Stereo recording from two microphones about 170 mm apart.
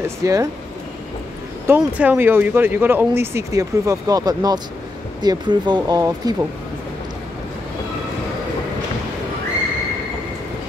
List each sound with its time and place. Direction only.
0.2 s speech: 20° right (ahead or behind)
1.7 s speech: 10° right (ahead or behind)